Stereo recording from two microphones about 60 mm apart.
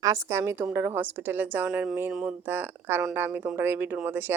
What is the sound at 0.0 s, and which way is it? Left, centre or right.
A woman's voice, right.